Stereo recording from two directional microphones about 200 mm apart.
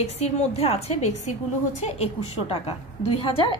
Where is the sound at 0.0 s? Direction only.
30° left (ahead or behind).